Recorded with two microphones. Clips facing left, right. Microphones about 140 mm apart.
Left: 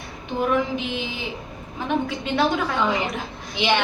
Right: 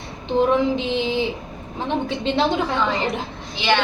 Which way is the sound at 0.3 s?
25° right (ahead or behind).